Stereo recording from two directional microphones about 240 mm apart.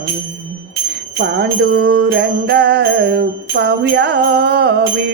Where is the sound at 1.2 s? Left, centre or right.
Right.